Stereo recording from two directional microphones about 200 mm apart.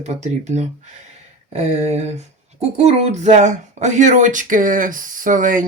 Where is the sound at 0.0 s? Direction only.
35° right (ahead or behind).